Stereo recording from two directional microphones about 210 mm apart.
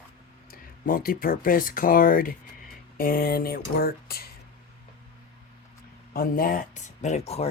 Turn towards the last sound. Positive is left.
turn(degrees=30)  # may be behind; listen again after turning